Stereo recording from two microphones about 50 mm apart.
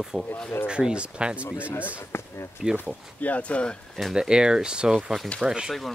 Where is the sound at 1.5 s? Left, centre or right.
Left.